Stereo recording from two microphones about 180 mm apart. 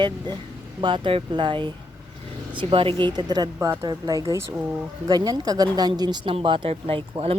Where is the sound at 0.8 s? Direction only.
25° right (ahead or behind).